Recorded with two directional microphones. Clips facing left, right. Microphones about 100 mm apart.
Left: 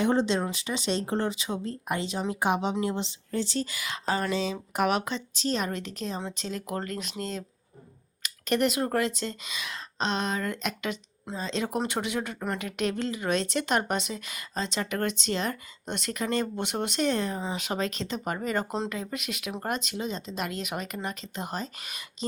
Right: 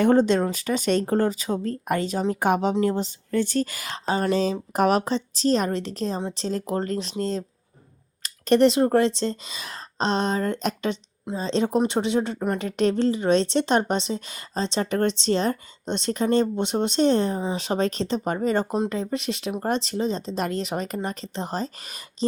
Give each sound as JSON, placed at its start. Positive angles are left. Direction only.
{"t": 0.0, "sound": "speech", "side_deg": -50}